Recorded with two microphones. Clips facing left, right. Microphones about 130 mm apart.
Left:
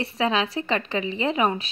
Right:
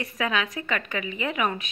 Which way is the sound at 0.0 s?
30° left (ahead or behind).